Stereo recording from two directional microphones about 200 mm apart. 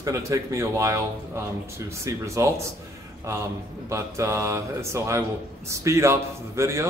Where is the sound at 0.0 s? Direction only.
15° right (ahead or behind).